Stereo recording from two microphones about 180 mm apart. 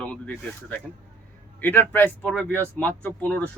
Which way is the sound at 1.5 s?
10° left (ahead or behind).